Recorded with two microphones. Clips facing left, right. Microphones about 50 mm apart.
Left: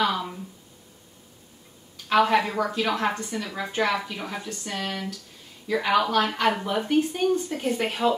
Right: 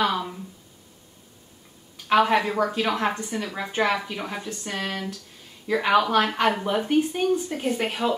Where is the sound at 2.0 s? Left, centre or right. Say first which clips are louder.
Right 1 dB; centre.